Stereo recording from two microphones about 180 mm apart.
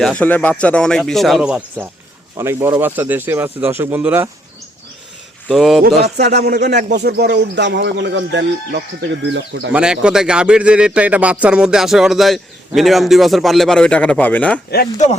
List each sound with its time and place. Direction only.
0.0 s a man's voice: 5° left (ahead or behind); by 4.3 s 10° right (ahead or behind)
5.5 s a man's voice: centre (ahead or behind)
6.0 s speech: 65° right (ahead or behind); by 9.7 s 90° right
9.7 s a man's voice: 5° right (ahead or behind)